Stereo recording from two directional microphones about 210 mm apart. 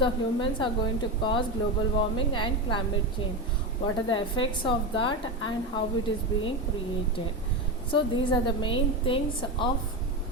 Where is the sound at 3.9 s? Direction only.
25° left (ahead or behind).